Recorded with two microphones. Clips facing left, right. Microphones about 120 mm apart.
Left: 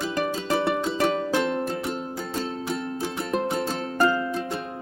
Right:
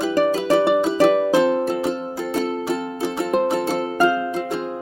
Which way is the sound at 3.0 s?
60° right (ahead or behind).